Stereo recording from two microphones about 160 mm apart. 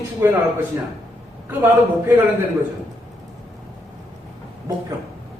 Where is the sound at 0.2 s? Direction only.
15° right (ahead or behind).